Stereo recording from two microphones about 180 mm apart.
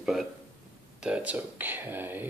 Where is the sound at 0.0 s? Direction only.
Centre (ahead or behind).